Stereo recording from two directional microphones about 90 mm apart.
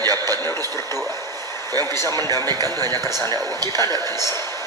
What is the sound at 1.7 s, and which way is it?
A man's voice, 45° right (ahead or behind).